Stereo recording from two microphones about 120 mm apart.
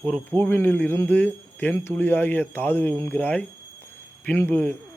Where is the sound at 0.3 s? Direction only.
15° left (ahead or behind).